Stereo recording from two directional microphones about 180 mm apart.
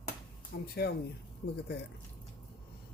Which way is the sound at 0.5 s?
60° left (ahead or behind).